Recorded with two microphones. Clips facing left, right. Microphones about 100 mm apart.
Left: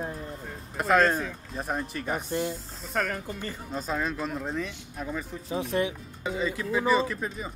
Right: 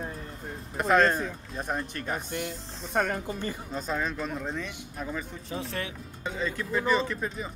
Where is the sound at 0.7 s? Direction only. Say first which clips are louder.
Even; centre (ahead or behind).